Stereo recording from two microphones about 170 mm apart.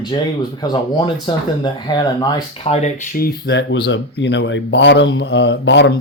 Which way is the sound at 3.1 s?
65° left (ahead or behind).